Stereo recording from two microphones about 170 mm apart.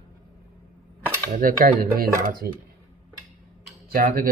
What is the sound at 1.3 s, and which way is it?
Speech, 55° right (ahead or behind).